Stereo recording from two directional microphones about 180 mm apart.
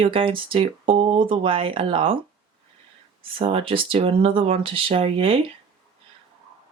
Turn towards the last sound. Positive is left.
turn(degrees=-30)  # may be behind; listen again after turning